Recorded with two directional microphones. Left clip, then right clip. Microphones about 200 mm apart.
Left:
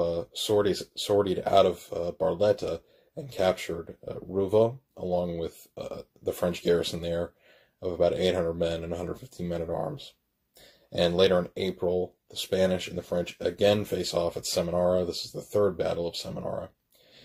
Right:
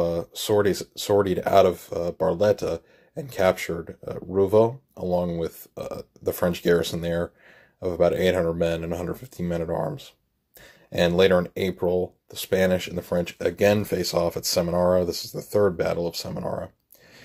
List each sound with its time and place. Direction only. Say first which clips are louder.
0.0 s a sound: right 3 dB; 25° right (ahead or behind)
0.4 s speech: right 3 dB; 20° right (ahead or behind)
10.9 s speech: right 4 dB; 25° right (ahead or behind)